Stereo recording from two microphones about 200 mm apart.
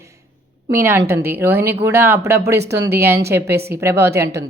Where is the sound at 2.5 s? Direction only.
55° right (ahead or behind).